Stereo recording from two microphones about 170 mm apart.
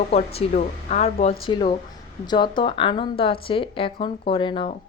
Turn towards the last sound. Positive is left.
turn(degrees=30)  # may be behind; listen again after turning